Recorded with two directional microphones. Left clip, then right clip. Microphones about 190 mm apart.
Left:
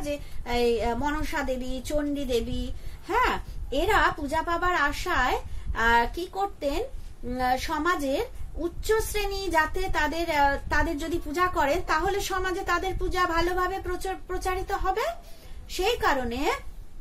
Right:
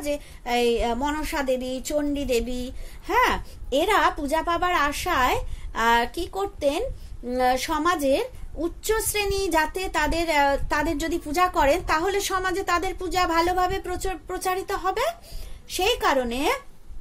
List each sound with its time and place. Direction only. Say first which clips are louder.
0.0 s a woman's voice: right 4 dB; 40° right (ahead or behind)